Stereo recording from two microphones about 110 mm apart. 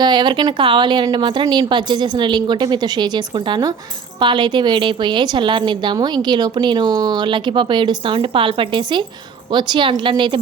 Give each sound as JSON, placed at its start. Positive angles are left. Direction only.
{"t": 0.0, "sound": "a woman's voice", "side_deg": -45}